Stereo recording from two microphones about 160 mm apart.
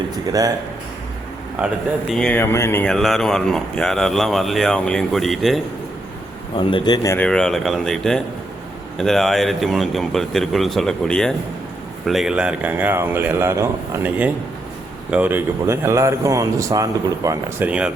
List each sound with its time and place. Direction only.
0.3 s speech: 20° right (ahead or behind)
2.0 s speech: 5° left (ahead or behind)
2.9 s speech: centre (ahead or behind)
6.6 s a man's voice: 30° left (ahead or behind)
7.3 s speech: 5° left (ahead or behind); by 17.7 s 20° right (ahead or behind)
17.7 s speech: 5° right (ahead or behind)